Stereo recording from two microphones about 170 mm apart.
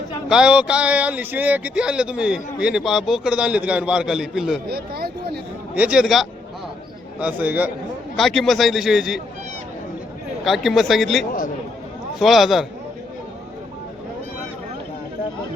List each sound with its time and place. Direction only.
0.3 s speech: 5° right (ahead or behind)
4.7 s speech: 65° right (ahead or behind)
5.7 s a man's voice: 5° right (ahead or behind)
8.1 s speech: centre (ahead or behind)
10.4 s speech: centre (ahead or behind)